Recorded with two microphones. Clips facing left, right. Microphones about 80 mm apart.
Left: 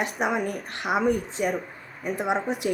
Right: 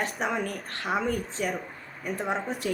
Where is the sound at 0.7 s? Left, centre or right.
Centre.